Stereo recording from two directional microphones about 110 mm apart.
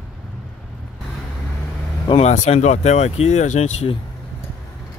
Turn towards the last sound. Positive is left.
turn(degrees=90)